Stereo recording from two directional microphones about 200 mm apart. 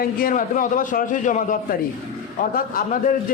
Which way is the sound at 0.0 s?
45° left (ahead or behind).